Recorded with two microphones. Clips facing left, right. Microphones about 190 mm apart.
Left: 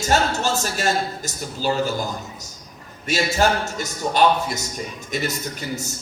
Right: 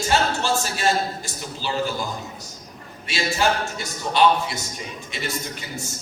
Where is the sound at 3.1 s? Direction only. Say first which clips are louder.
Left 3 dB; 40° left (ahead or behind).